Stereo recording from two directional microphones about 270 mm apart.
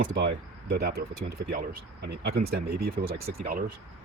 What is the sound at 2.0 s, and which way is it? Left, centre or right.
Speech, right.